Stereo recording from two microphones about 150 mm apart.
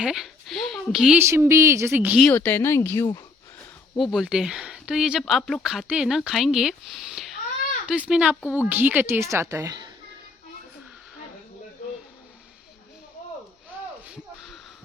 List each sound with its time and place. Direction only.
0.0 s speech: centre (ahead or behind)
1.2 s a woman's voice: 15° right (ahead or behind)
2.2 s speech: 10° left (ahead or behind)
3.9 s speech: centre (ahead or behind)
5.4 s speech: 10° left (ahead or behind)
5.6 s a woman's voice: 5° right (ahead or behind); by 9.9 s 25° right (ahead or behind)